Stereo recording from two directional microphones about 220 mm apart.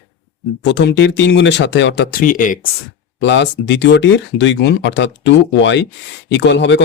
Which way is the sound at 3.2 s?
55° left (ahead or behind).